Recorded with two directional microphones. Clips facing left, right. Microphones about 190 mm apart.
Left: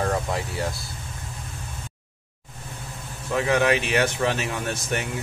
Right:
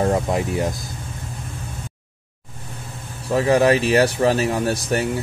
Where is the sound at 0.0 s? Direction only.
20° right (ahead or behind).